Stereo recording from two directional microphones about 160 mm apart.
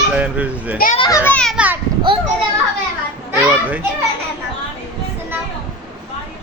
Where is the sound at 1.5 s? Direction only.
10° right (ahead or behind).